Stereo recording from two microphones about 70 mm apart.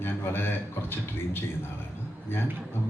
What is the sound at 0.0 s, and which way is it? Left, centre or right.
A man's voice, left.